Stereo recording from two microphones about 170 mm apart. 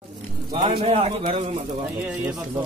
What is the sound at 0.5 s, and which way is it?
Speech, 35° right (ahead or behind).